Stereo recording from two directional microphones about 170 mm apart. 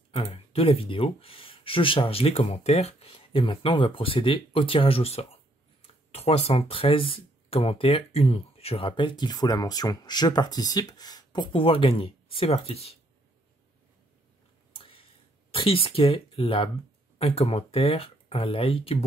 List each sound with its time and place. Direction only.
0.1 s speech: 35° left (ahead or behind)
14.7 s a sound: 35° left (ahead or behind)
15.5 s speech: 30° left (ahead or behind)